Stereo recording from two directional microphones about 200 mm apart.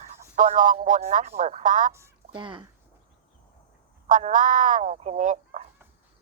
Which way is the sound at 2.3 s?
25° right (ahead or behind).